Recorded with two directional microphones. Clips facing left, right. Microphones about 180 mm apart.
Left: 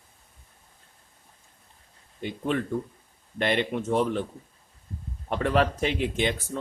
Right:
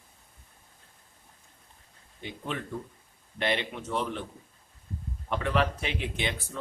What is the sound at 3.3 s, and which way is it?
Speech, 50° left (ahead or behind).